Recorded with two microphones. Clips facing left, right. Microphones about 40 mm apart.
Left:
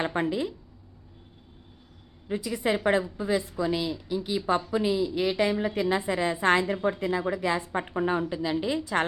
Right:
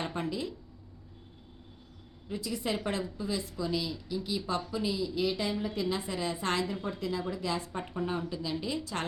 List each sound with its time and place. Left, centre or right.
0.0 s speech: left
2.2 s a woman's voice: left